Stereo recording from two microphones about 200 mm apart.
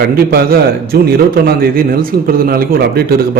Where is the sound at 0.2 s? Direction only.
50° right (ahead or behind).